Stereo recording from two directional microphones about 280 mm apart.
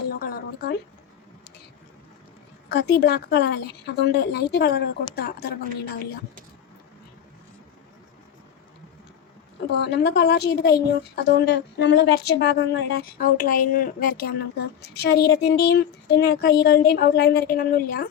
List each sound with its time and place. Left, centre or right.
0.1 s a sound: left
2.6 s a woman's voice: left
9.7 s a woman's voice: left